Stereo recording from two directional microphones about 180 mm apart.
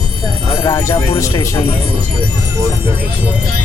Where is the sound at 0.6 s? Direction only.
15° left (ahead or behind).